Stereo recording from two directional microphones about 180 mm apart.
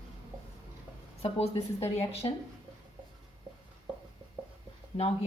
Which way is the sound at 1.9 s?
35° left (ahead or behind).